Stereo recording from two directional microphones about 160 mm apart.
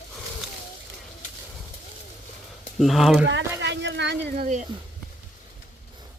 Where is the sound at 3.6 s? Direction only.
90° right.